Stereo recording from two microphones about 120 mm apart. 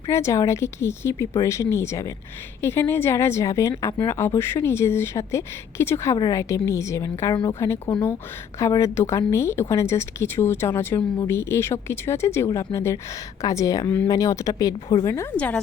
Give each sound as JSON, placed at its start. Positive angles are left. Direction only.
{"t": 0.1, "sound": "speech", "side_deg": 25}
{"t": 15.4, "sound": "a woman's voice", "side_deg": 10}